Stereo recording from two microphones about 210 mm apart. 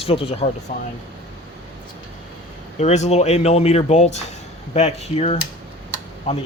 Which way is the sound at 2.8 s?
30° left (ahead or behind).